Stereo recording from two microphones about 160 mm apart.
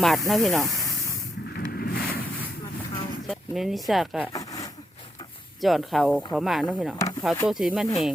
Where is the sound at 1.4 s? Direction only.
80° left.